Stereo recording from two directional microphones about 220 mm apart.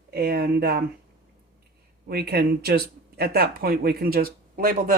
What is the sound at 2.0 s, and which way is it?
Speech, 45° right (ahead or behind).